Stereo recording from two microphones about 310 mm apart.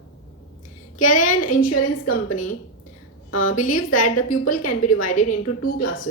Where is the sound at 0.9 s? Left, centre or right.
Left.